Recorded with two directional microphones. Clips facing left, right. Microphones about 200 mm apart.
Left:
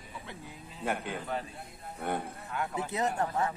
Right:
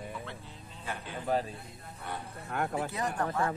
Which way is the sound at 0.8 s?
60° left (ahead or behind).